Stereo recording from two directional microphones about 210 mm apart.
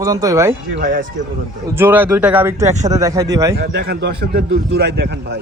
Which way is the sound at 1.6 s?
10° right (ahead or behind).